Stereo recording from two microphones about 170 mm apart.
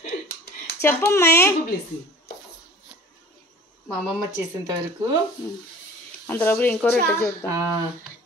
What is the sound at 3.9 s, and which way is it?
Speech, centre (ahead or behind).